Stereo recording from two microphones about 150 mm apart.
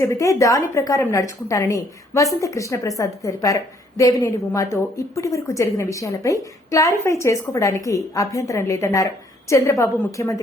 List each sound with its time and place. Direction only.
0.0 s a woman's voice: 20° left (ahead or behind)